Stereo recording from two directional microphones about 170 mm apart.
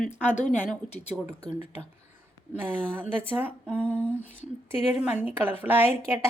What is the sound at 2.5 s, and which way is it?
Speech, 10° right (ahead or behind).